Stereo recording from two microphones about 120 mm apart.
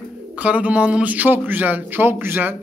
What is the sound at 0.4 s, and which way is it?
A man's voice, 10° right (ahead or behind).